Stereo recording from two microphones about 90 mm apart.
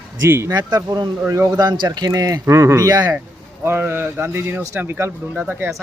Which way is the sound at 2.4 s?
30° right (ahead or behind).